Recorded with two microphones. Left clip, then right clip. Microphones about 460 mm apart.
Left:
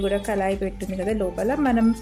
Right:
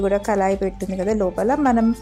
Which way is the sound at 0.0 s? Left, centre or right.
Left.